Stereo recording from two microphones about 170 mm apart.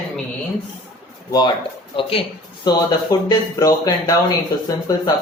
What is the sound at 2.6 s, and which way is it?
A man's voice, 25° left (ahead or behind).